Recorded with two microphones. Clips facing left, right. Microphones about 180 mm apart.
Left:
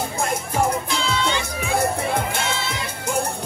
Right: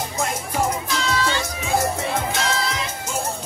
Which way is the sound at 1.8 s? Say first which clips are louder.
Left 2 dB; 55° left (ahead or behind).